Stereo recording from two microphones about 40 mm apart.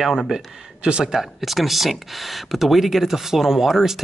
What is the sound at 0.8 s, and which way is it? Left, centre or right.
Speech, right.